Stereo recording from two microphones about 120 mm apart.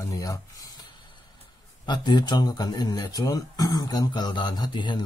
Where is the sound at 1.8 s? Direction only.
40° left (ahead or behind).